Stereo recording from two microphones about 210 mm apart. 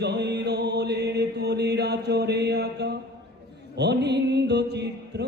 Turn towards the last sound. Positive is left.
turn(degrees=-55)  # may be behind; listen again after turning